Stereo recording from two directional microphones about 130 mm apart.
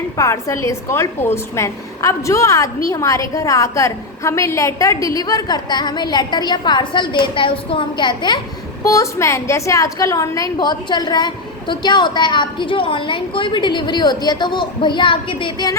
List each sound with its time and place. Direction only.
0.2 s a woman's voice: 25° left (ahead or behind)
8.8 s a woman's voice: 25° left (ahead or behind)